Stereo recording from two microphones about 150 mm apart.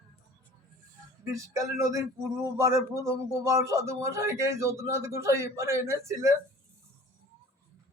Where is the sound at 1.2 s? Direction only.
20° right (ahead or behind).